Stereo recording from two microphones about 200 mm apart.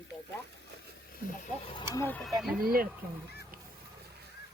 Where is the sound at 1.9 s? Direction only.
10° left (ahead or behind).